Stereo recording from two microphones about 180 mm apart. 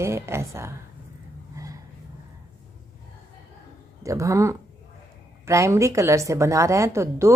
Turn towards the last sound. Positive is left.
turn(degrees=-15)  # may be behind; listen again after turning